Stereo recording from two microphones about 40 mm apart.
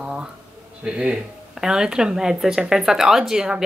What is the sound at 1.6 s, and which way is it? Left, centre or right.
Speech, centre.